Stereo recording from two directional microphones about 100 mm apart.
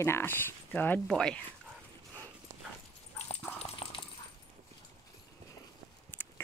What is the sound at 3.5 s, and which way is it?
Dog, 90° left.